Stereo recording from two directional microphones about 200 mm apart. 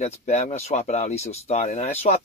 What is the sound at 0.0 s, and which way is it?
Speech, 35° left (ahead or behind).